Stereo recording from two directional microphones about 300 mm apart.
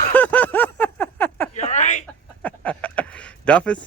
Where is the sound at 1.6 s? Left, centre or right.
Left.